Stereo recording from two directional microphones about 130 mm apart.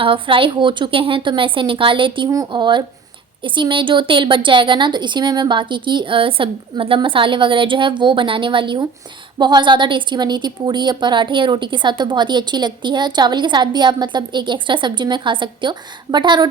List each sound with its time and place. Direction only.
0.0 s a woman's voice: 40° right (ahead or behind)